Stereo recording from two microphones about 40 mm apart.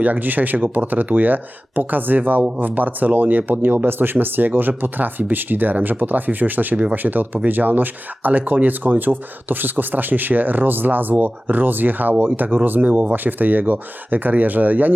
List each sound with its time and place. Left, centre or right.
0.0 s speech: right